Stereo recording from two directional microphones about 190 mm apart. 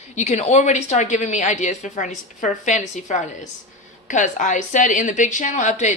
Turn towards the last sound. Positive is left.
turn(degrees=40)  # may be behind; listen again after turning